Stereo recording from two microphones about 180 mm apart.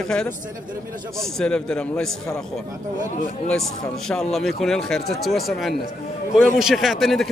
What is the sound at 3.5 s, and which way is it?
A man's voice, 5° left (ahead or behind).